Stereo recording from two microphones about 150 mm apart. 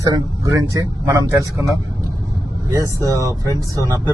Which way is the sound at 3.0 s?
25° right (ahead or behind).